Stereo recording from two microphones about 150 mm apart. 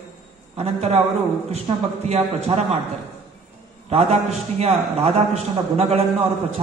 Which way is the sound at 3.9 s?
40° right (ahead or behind).